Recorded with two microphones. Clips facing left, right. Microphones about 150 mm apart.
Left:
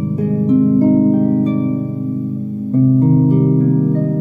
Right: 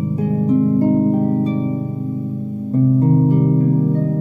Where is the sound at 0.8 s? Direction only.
20° right (ahead or behind).